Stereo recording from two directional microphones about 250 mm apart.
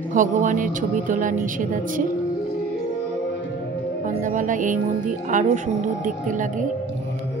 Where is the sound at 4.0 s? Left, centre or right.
Right.